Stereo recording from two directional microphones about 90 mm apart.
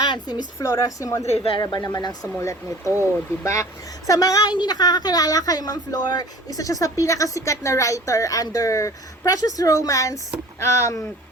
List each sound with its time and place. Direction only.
0.0 s speech: 50° left (ahead or behind); by 1.4 s 35° left (ahead or behind)
1.6 s speech: 45° left (ahead or behind)
2.4 s speech: 35° left (ahead or behind)